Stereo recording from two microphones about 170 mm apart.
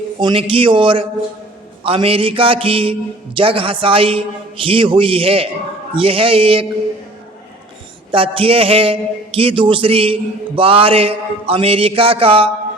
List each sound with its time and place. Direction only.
0.2 s a man's voice: 30° right (ahead or behind)
8.1 s a man's voice: 30° right (ahead or behind)